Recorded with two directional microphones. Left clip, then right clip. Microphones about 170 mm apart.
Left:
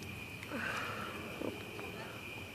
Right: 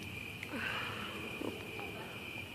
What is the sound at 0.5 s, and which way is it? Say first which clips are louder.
Sniff: even; 25° left (ahead or behind).